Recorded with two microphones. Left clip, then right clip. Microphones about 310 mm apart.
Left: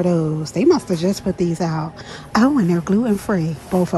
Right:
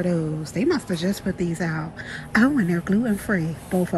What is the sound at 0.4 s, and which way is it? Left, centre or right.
Speech, centre.